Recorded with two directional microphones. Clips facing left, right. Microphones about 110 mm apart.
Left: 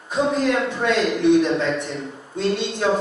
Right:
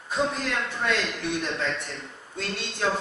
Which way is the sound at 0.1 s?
5° left (ahead or behind).